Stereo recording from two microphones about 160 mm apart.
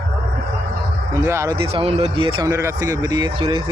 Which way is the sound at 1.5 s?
35° right (ahead or behind).